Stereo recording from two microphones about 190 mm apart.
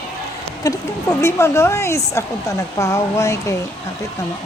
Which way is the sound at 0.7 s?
20° left (ahead or behind).